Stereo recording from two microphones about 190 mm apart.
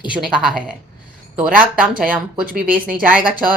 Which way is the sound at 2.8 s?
45° right (ahead or behind).